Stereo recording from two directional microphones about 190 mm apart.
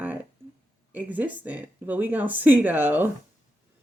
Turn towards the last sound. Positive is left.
turn(degrees=-10)  # may be behind; listen again after turning